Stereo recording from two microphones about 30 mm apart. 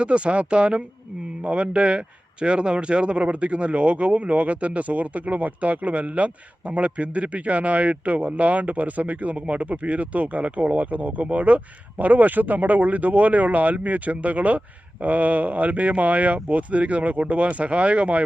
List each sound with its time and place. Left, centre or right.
0.0 s speech: right